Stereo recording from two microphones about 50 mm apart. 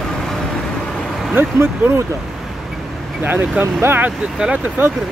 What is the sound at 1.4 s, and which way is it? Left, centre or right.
Speech, right.